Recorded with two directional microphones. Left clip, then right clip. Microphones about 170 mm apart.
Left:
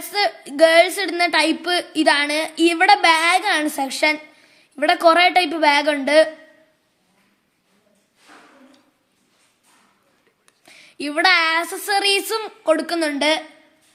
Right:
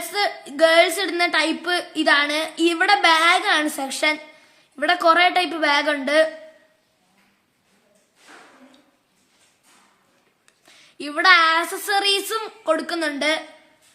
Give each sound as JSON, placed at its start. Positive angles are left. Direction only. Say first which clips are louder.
{"t": 0.1, "sound": "a woman's voice", "louder": "left 3 dB", "side_deg": 35}
{"t": 10.7, "sound": "a woman's voice", "louder": "left 4 dB", "side_deg": 30}